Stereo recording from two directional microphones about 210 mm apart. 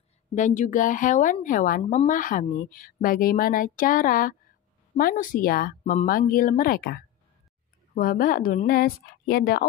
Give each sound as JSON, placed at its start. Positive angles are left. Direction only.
{"t": 0.3, "sound": "speech", "side_deg": 35}